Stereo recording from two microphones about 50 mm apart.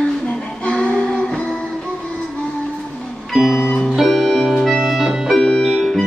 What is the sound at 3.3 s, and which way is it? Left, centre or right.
Music, centre.